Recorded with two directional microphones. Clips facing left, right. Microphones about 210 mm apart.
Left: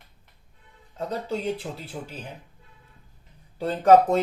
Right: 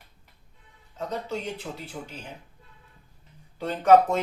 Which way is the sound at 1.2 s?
30° left (ahead or behind).